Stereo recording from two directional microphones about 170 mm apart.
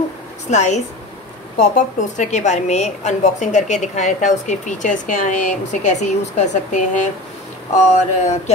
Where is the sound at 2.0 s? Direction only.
45° left (ahead or behind).